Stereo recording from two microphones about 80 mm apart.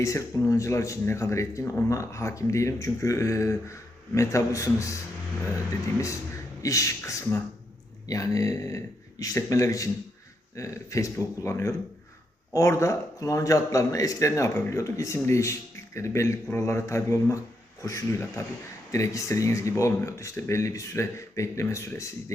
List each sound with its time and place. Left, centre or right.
0.0 s speech: left
6.6 s speech: left